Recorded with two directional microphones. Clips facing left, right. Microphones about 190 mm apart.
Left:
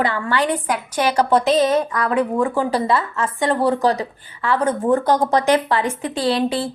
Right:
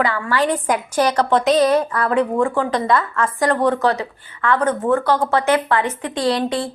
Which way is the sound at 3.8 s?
35° left (ahead or behind).